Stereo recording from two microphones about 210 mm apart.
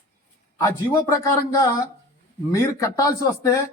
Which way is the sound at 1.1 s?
15° left (ahead or behind).